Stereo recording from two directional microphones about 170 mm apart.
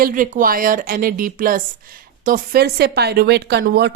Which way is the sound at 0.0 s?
55° right (ahead or behind).